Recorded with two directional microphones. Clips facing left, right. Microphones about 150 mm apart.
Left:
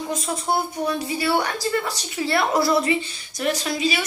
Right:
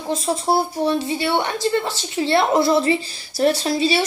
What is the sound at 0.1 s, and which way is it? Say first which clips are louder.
A woman's voice: right 6 dB; 30° right (ahead or behind).